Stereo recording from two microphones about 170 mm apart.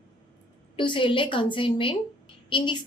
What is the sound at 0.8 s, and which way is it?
A woman's voice, 30° left (ahead or behind).